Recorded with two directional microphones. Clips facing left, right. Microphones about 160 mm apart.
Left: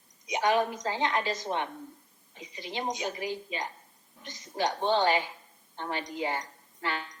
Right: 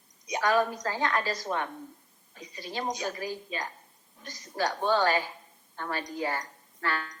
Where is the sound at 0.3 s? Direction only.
20° left (ahead or behind).